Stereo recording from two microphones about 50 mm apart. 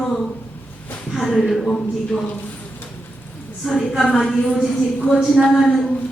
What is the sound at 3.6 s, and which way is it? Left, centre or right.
A woman's voice, centre.